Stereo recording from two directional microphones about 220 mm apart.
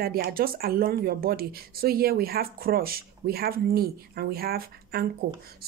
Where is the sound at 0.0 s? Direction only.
45° right (ahead or behind).